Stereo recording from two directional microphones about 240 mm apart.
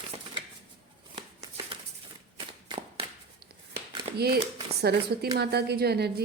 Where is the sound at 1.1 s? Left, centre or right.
Right.